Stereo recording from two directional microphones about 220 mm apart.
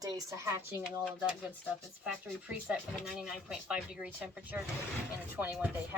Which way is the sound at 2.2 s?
5° right (ahead or behind).